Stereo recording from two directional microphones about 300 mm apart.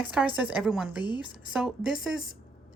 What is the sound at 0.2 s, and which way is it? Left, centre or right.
A woman's voice, centre.